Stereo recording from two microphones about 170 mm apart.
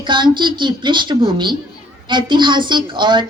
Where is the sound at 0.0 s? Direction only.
25° right (ahead or behind).